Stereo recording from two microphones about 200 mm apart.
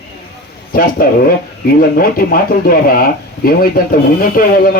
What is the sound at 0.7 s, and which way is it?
Speech, 45° left (ahead or behind).